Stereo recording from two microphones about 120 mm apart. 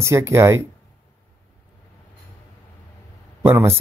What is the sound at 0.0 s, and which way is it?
Speech, 25° right (ahead or behind).